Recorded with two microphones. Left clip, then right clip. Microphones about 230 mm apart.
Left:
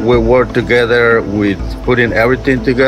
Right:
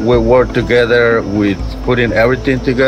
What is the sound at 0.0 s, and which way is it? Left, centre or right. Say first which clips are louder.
Speech: even; centre.